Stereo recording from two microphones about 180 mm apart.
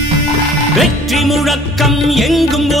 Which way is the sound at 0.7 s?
Centre (ahead or behind).